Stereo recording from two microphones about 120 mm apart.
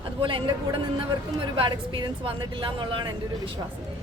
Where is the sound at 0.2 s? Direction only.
45° right (ahead or behind).